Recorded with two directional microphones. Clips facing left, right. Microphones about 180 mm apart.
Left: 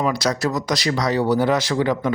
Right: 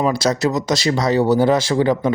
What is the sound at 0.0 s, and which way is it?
Speech, 30° right (ahead or behind).